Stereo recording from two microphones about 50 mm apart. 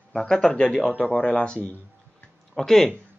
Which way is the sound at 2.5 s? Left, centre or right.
Centre.